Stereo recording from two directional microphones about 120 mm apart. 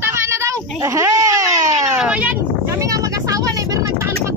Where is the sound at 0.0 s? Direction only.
20° right (ahead or behind).